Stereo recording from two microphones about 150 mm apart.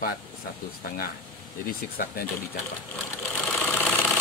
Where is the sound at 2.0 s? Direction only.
75° left (ahead or behind).